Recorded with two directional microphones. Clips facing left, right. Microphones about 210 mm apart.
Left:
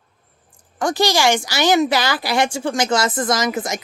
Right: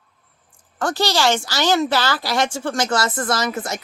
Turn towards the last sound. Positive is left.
turn(degrees=15)  # may be behind; listen again after turning